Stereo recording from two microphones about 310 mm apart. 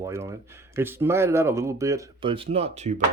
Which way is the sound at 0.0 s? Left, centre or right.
Centre.